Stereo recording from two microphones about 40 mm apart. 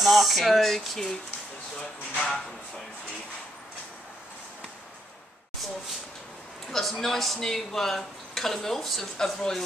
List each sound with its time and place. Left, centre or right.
0.0 s speech: centre
6.7 s speech: centre